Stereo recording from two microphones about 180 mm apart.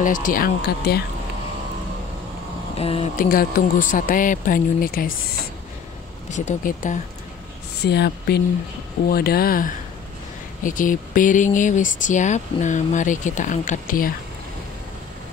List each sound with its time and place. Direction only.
0.0 s speech: 45° left (ahead or behind)
2.7 s speech: 35° left (ahead or behind)
3.2 s speech: 50° left (ahead or behind)
6.3 s speech: 45° left (ahead or behind)
7.8 s speech: 65° left (ahead or behind); by 14.1 s 50° left (ahead or behind)